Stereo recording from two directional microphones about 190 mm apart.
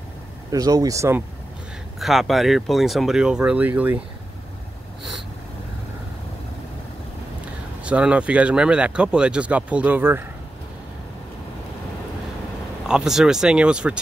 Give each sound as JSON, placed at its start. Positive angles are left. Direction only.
{"t": 0.5, "sound": "speech", "side_deg": -20}
{"t": 2.0, "sound": "speech", "side_deg": 0}
{"t": 7.8, "sound": "speech", "side_deg": -5}
{"t": 12.8, "sound": "speech", "side_deg": -5}